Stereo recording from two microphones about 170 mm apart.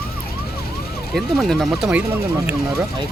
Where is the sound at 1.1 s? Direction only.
Centre (ahead or behind).